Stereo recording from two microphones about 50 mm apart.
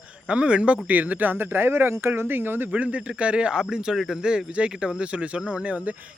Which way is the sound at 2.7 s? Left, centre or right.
Right.